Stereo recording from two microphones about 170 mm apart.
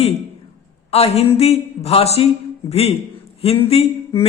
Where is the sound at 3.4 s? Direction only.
35° left (ahead or behind).